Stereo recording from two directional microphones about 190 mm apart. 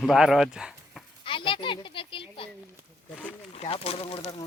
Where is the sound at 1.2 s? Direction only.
25° left (ahead or behind).